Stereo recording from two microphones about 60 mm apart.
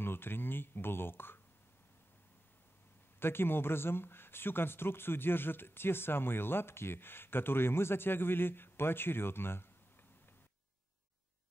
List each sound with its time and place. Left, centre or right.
0.0 s speech: left
3.2 s speech: left